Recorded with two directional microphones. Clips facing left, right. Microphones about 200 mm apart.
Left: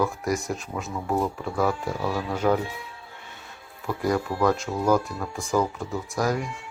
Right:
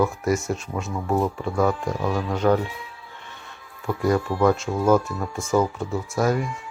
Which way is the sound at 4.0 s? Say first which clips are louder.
Right 3 dB; centre (ahead or behind).